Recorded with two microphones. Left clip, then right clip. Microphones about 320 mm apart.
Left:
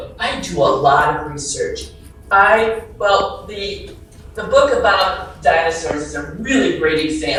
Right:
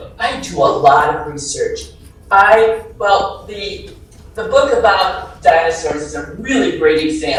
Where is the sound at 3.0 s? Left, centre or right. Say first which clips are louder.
Right 1 dB; centre.